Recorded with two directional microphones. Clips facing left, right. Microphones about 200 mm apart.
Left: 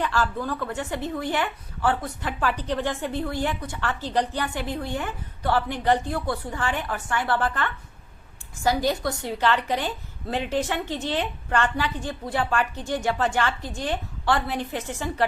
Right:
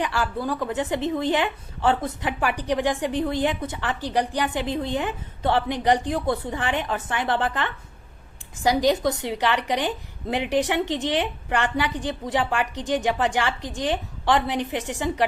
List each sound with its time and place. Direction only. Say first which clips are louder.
0.0 s speech: even; 15° right (ahead or behind)